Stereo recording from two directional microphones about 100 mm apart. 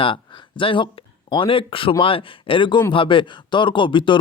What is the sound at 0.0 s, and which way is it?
Speech, 60° left (ahead or behind).